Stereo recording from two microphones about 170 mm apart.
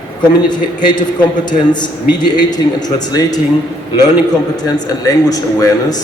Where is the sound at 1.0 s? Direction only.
25° left (ahead or behind).